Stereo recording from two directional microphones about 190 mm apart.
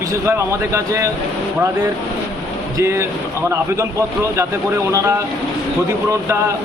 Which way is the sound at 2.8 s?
15° right (ahead or behind).